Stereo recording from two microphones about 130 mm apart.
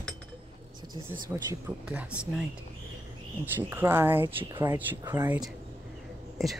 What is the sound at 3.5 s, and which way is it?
Speech, 15° right (ahead or behind).